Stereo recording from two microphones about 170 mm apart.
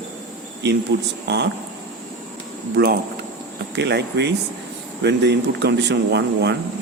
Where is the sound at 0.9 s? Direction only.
90° right.